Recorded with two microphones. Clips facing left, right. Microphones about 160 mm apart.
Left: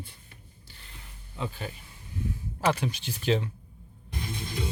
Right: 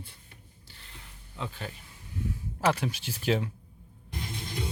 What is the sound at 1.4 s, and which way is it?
Speech, 5° left (ahead or behind).